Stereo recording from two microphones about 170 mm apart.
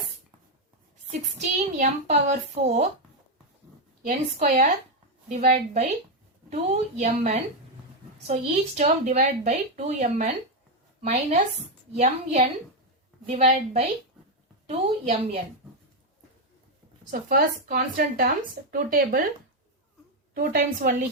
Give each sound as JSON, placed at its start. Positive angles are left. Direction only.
{"t": 1.4, "sound": "a woman's voice", "side_deg": -45}
{"t": 4.4, "sound": "speech", "side_deg": -55}
{"t": 5.3, "sound": "a woman's voice", "side_deg": -45}
{"t": 17.1, "sound": "speech", "side_deg": -55}
{"t": 20.3, "sound": "a woman's voice", "side_deg": -55}